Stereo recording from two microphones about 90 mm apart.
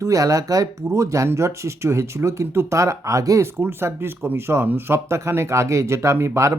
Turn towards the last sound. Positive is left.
turn(degrees=-35)  # may be behind; listen again after turning